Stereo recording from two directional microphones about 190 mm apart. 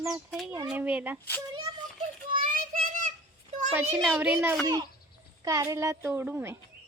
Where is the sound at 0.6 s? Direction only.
10° right (ahead or behind).